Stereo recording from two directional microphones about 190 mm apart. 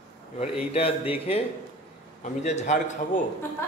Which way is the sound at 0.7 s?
30° left (ahead or behind).